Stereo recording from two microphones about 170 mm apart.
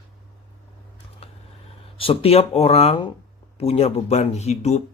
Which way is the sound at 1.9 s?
35° left (ahead or behind).